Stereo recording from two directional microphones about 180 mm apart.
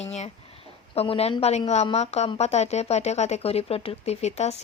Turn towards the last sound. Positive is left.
turn(degrees=40)  # may be behind; listen again after turning